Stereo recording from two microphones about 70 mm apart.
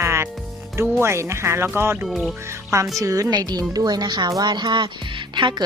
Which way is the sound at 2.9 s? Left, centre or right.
Right.